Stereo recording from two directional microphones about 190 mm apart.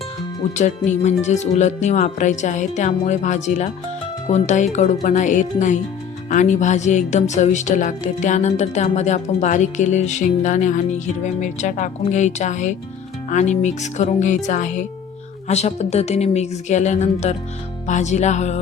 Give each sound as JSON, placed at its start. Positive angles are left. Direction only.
{"t": 0.5, "sound": "speech", "side_deg": 40}